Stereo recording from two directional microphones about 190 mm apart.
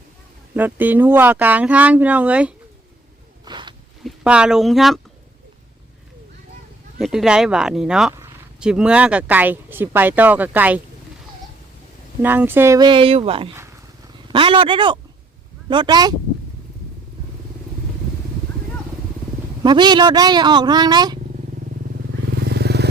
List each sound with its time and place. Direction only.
0.5 s speech: 10° right (ahead or behind)
3.4 s zipper: 25° right (ahead or behind)
4.0 s speech: 5° right (ahead or behind)
7.0 s speech: centre (ahead or behind)
12.2 s speech: 10° right (ahead or behind); by 13.5 s 30° right (ahead or behind)
14.3 s a sound: 25° right (ahead or behind)
15.7 s speech: 25° right (ahead or behind)
19.6 s speech: 20° right (ahead or behind)
22.4 s vehicle: 60° right (ahead or behind)